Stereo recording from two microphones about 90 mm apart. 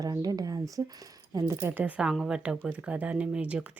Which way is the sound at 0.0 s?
45° right (ahead or behind).